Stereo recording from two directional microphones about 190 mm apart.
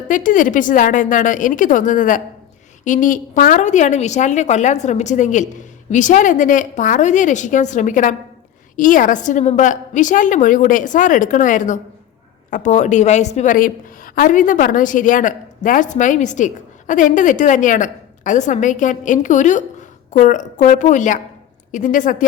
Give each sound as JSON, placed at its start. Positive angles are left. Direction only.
{"t": 0.1, "sound": "a woman's voice", "side_deg": 45}